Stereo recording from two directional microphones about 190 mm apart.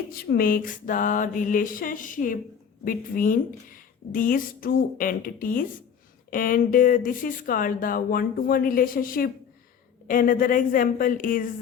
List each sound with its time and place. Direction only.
0.1 s speech: 50° left (ahead or behind)